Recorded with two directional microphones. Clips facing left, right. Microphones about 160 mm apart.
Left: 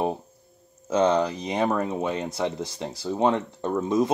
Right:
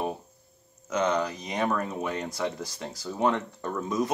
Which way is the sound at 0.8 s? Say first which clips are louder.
Left 5 dB; 30° left (ahead or behind).